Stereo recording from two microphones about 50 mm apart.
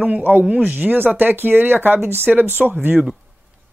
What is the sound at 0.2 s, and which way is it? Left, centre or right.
Speech, right.